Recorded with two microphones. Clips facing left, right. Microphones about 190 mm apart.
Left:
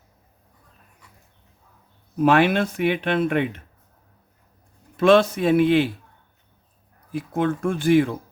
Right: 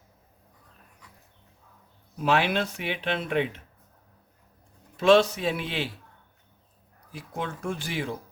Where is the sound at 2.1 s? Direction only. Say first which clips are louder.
Left 7 dB; 50° left (ahead or behind).